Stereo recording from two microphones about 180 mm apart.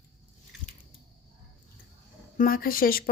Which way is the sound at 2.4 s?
55° left (ahead or behind).